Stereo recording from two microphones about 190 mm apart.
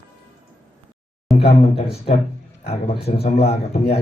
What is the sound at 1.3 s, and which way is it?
Speech, 30° left (ahead or behind).